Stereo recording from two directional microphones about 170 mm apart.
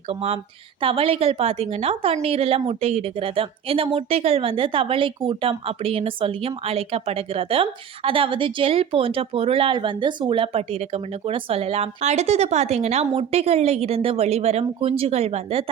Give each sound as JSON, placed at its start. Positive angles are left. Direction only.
{"t": 0.1, "sound": "speech", "side_deg": -35}